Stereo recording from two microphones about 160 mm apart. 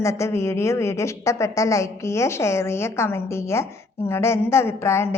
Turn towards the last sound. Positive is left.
turn(degrees=15)  # may be behind; listen again after turning